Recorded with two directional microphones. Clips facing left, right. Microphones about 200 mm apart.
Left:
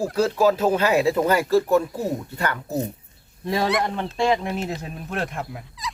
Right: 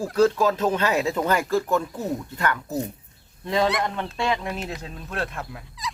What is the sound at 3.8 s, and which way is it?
Speech, 30° left (ahead or behind).